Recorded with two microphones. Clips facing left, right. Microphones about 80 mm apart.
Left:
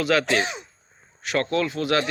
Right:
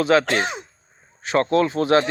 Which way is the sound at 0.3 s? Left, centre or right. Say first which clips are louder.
Right 1 dB; right.